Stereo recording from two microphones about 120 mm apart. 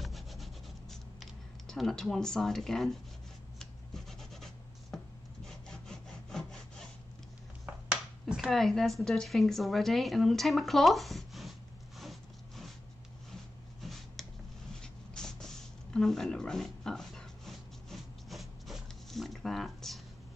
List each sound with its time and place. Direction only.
0.0 s rub: centre (ahead or behind)
5.7 s sawing: 5° left (ahead or behind)
7.6 s speech: 10° right (ahead or behind)
12.0 s zipper: centre (ahead or behind)
13.7 s a sound: centre (ahead or behind)